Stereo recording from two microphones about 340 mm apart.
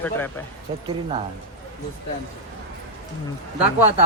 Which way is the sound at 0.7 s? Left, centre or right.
Centre.